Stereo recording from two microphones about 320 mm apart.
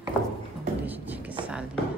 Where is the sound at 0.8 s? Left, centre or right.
Centre.